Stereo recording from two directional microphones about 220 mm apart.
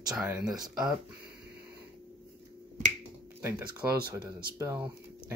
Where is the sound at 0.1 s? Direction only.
5° right (ahead or behind).